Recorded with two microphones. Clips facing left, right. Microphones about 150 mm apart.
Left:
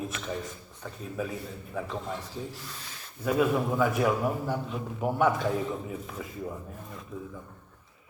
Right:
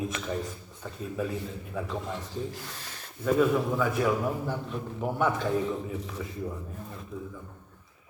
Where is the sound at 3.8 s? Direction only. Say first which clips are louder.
Left 1 dB; 10° left (ahead or behind).